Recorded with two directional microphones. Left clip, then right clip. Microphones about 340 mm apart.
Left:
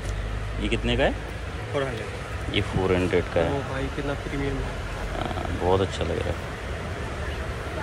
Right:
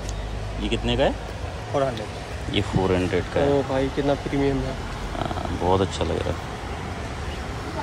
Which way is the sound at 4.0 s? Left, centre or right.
Right.